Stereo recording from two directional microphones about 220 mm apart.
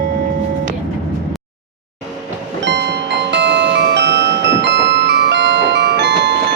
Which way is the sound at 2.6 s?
50° right (ahead or behind).